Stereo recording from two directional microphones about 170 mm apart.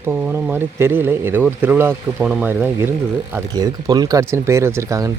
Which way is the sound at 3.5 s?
20° right (ahead or behind).